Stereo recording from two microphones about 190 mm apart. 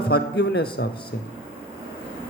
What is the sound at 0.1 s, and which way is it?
Speech, 55° left (ahead or behind).